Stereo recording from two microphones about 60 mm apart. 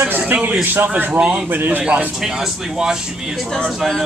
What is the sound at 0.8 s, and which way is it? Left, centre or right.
Speech, right.